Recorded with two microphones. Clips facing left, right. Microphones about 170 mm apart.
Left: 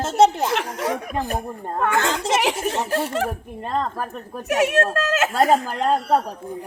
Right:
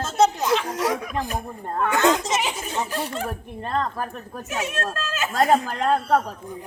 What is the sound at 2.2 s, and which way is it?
Speech, 70° left (ahead or behind).